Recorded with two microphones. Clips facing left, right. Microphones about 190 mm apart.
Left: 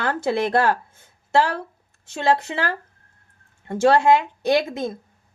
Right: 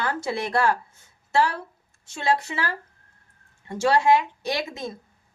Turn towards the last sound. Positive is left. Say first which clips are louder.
# left 8 dB
turn(degrees=55)  # may be behind; listen again after turning